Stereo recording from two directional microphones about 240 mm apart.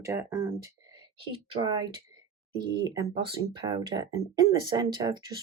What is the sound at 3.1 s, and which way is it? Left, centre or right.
Speech, right.